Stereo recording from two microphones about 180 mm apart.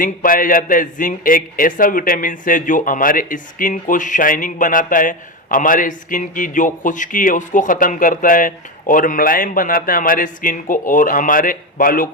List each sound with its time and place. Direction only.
0.0 s a man's voice: 50° left (ahead or behind)